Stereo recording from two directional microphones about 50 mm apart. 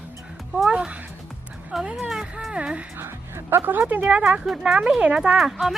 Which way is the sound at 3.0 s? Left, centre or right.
Right.